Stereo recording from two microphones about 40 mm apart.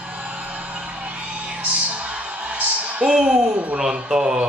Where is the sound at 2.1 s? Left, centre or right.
Right.